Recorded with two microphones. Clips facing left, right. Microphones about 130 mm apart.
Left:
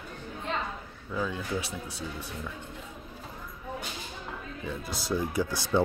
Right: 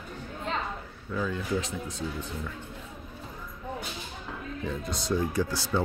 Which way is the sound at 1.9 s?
75° left (ahead or behind).